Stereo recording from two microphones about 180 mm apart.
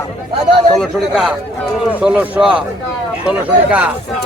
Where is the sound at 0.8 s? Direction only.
5° right (ahead or behind).